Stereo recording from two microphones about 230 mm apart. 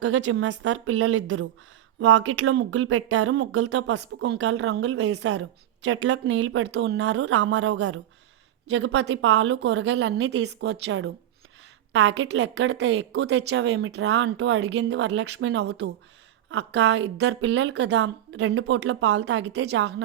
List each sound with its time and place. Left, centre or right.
0.0 s speech: right
7.7 s speech: right
8.7 s speech: right